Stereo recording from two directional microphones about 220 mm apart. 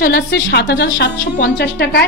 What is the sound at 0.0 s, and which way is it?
A woman's voice, 45° left (ahead or behind).